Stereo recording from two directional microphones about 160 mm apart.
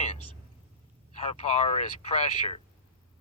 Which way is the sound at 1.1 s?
45° left (ahead or behind).